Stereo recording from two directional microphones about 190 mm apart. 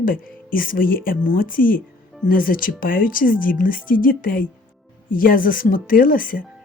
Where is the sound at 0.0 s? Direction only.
50° left (ahead or behind).